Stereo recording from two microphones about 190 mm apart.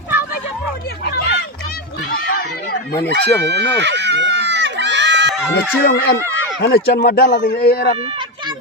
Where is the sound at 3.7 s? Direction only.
65° right (ahead or behind).